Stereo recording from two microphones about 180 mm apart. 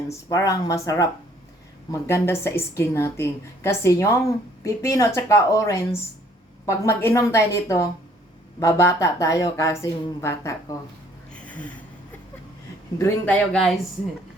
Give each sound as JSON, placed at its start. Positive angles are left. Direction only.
{"t": 0.1, "sound": "a woman's voice", "side_deg": 20}
{"t": 11.4, "sound": "a sound", "side_deg": 10}
{"t": 13.0, "sound": "a woman's voice", "side_deg": 10}